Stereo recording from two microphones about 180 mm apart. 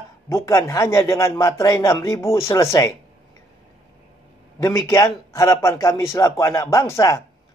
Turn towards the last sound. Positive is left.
turn(degrees=15)  # may be behind; listen again after turning